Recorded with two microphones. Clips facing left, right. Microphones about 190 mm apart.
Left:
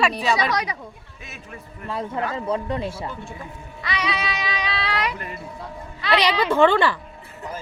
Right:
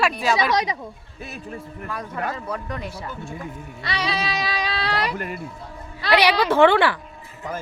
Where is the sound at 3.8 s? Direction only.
35° right (ahead or behind).